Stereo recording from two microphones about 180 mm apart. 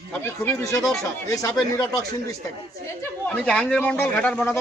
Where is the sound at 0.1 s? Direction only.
10° left (ahead or behind).